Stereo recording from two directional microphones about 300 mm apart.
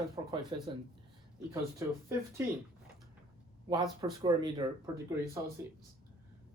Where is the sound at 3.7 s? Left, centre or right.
Centre.